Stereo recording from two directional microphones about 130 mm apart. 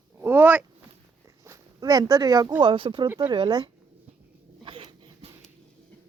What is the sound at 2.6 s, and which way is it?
Speech, 40° right (ahead or behind).